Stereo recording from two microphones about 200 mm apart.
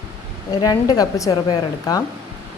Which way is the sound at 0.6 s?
20° left (ahead or behind).